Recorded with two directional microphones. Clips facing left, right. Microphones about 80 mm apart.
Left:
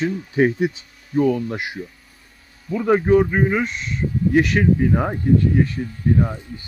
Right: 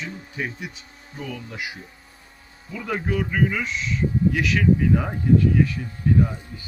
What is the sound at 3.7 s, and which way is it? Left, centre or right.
Speech, left.